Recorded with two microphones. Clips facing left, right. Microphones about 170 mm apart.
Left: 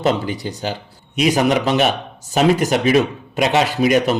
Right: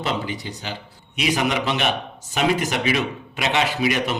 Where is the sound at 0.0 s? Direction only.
45° left (ahead or behind).